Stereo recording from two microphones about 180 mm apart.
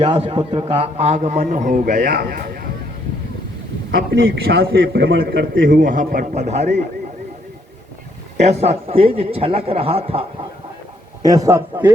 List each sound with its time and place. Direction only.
0.0 s a man's voice: 30° right (ahead or behind); by 2.6 s 55° right (ahead or behind)
4.2 s a man's voice: 55° right (ahead or behind); by 5.2 s 75° right (ahead or behind)
5.2 s a man's voice: 60° right (ahead or behind); by 6.7 s 40° right (ahead or behind)
8.4 s a man's voice: 35° right (ahead or behind)
11.2 s a man's voice: 20° right (ahead or behind)